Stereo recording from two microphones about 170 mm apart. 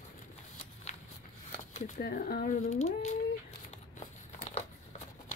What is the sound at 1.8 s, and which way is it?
Speech, 55° left (ahead or behind).